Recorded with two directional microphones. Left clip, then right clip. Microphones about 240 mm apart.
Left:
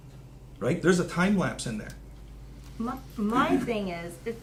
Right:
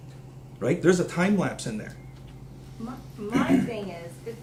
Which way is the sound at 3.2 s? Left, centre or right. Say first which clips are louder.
Left 2 dB; left.